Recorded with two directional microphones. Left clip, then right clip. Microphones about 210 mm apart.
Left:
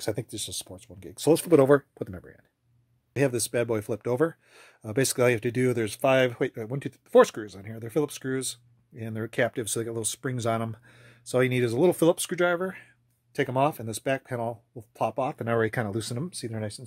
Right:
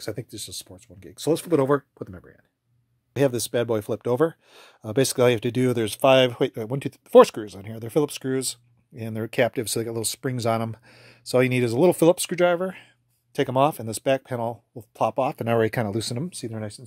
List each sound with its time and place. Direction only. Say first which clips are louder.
0.0 s speech: left 2 dB; 5° left (ahead or behind)
3.2 s speech: right 3 dB; 25° right (ahead or behind)